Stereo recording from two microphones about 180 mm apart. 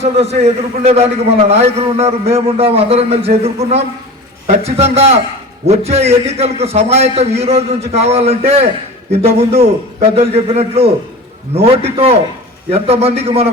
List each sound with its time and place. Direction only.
0.0 s a man's voice: 35° right (ahead or behind)